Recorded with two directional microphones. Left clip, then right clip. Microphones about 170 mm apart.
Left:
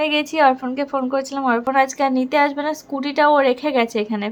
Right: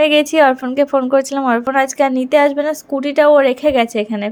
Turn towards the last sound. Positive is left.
turn(degrees=-15)  # may be behind; listen again after turning